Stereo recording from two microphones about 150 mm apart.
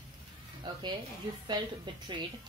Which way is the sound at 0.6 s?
30° right (ahead or behind).